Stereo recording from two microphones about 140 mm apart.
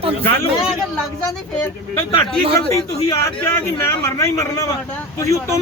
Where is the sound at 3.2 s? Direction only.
20° left (ahead or behind).